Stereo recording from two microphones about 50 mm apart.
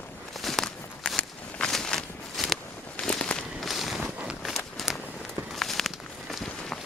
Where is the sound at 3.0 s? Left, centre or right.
Centre.